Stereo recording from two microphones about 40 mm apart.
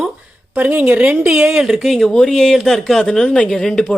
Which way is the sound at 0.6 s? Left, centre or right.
Right.